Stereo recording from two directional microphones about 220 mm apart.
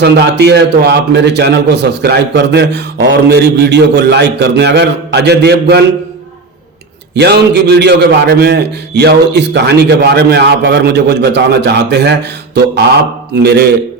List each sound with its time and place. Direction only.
0.0 s a man's voice: 50° right (ahead or behind)
7.2 s a man's voice: 50° right (ahead or behind)